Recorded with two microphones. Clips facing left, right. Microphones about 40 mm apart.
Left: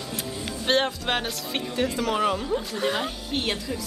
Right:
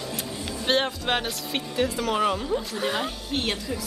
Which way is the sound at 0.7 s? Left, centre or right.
Centre.